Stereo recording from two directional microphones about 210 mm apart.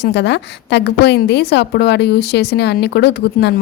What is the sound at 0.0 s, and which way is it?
A woman's voice, 55° left (ahead or behind).